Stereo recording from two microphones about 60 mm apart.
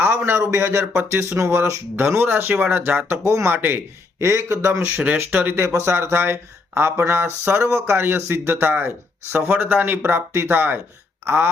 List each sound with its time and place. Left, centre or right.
0.0 s speech: right
3.2 s speech: right
3.5 s speech: right
4.2 s speech: right
5.0 s speech: right
5.6 s speech: right
10.1 s speech: right